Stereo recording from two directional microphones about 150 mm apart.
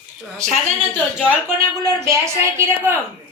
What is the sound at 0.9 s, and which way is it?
Speech, 5° right (ahead or behind).